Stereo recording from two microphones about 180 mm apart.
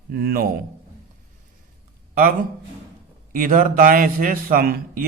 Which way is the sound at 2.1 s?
50° right (ahead or behind).